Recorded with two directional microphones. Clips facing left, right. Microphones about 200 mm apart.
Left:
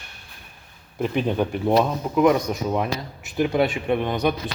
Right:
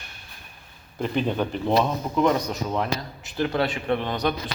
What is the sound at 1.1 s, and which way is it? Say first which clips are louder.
Speech: left 1 dB; 10° left (ahead or behind).